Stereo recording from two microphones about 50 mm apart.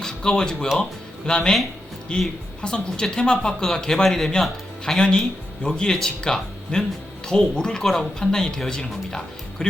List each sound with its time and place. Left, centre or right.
0.0 s a woman's voice: centre